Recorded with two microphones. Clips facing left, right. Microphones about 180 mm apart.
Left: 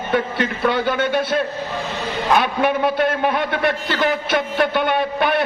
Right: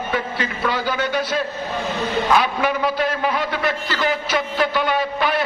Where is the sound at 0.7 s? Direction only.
60° left (ahead or behind).